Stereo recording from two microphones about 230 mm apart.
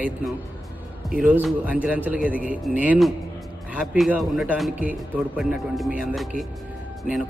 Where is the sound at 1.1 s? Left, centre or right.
Centre.